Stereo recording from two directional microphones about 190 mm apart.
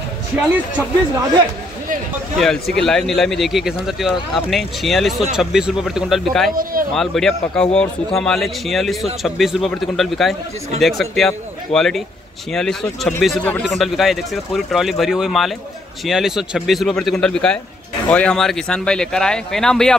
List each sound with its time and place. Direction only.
0.5 s speech: 10° right (ahead or behind)
2.8 s a man's voice: 5° left (ahead or behind)
6.5 s speech: 50° right (ahead or behind)
7.0 s a man's voice: centre (ahead or behind)